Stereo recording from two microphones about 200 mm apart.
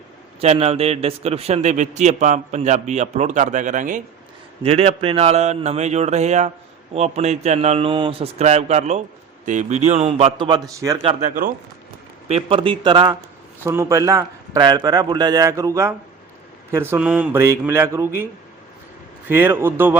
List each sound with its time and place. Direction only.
0.4 s a man's voice: 30° right (ahead or behind)
12.3 s speech: 25° right (ahead or behind)
19.3 s speech: 10° right (ahead or behind)